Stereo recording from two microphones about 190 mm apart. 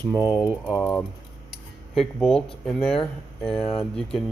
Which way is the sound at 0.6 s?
Centre (ahead or behind).